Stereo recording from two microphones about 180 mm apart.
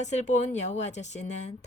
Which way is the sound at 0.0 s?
40° left (ahead or behind).